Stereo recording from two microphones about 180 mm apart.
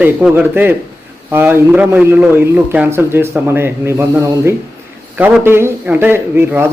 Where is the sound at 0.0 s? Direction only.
5° right (ahead or behind).